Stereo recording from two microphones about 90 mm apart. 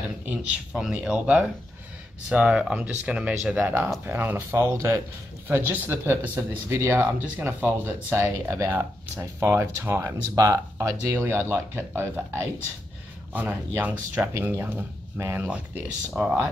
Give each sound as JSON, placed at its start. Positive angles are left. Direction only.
{"t": 0.9, "sound": "speech", "side_deg": -15}
{"t": 7.0, "sound": "speech", "side_deg": -20}
{"t": 13.3, "sound": "speech", "side_deg": -20}
{"t": 16.1, "sound": "speech", "side_deg": 0}